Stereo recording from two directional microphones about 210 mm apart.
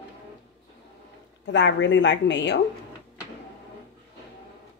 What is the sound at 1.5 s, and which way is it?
A woman's voice, 60° left (ahead or behind).